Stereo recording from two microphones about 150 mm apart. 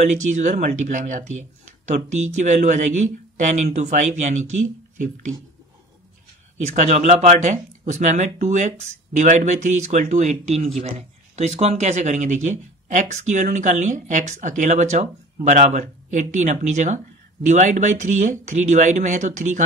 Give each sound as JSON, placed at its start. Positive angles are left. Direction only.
{"t": 0.0, "sound": "speech", "side_deg": -55}
{"t": 6.6, "sound": "speech", "side_deg": -50}